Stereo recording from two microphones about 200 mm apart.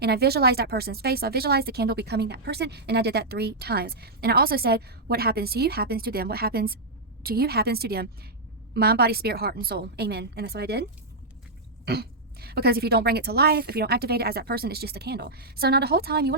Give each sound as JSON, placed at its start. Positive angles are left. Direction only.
{"t": 0.0, "sound": "speech", "side_deg": -55}
{"t": 11.9, "sound": "speech", "side_deg": -50}